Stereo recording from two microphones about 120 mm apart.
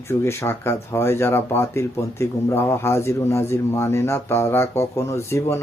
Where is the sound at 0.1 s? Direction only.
20° left (ahead or behind).